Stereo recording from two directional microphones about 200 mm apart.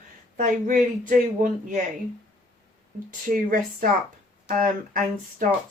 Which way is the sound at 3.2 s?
40° right (ahead or behind).